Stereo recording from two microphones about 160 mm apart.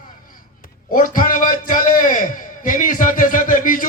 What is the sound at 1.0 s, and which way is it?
Music, 60° left (ahead or behind).